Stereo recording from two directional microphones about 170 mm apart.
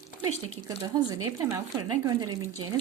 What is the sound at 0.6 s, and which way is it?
Speech, 25° right (ahead or behind).